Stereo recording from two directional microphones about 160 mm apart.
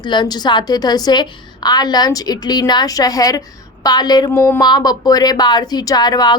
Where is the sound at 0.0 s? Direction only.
30° left (ahead or behind).